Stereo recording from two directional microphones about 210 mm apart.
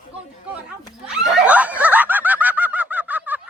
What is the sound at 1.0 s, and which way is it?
Snicker, 5° right (ahead or behind).